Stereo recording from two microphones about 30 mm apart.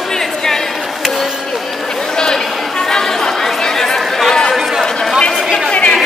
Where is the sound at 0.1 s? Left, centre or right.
Centre.